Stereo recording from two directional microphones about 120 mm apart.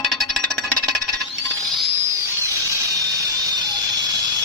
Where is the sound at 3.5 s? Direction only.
30° right (ahead or behind).